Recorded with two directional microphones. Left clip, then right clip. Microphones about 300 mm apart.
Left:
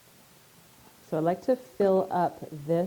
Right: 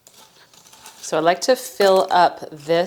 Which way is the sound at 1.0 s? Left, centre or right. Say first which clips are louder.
Right 10 dB; centre.